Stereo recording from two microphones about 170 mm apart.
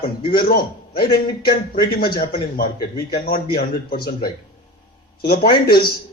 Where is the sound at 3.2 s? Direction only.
65° left (ahead or behind).